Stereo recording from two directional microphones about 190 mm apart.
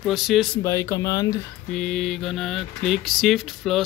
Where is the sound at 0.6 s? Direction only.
15° left (ahead or behind).